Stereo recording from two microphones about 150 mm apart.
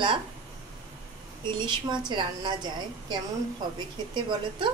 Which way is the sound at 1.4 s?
30° right (ahead or behind).